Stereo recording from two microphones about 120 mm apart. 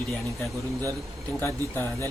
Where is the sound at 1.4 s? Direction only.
20° left (ahead or behind).